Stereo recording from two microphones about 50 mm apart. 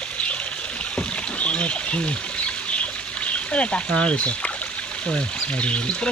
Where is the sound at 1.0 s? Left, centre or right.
Left.